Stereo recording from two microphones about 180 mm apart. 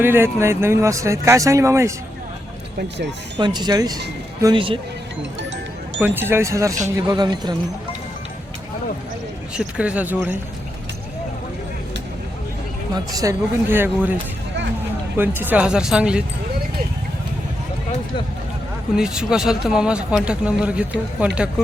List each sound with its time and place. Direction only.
0.0 s speech: 15° right (ahead or behind)
3.3 s speech: 25° right (ahead or behind)
6.0 s speech: 10° right (ahead or behind)
9.6 s speech: 5° right (ahead or behind)
12.9 s speech: 20° right (ahead or behind)
15.2 s speech: 10° right (ahead or behind)
18.9 s speech: 5° right (ahead or behind)